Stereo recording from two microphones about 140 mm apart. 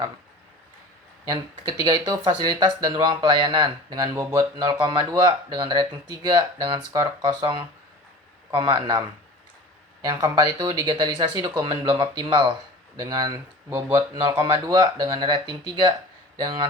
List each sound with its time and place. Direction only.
1.3 s speech: 30° right (ahead or behind)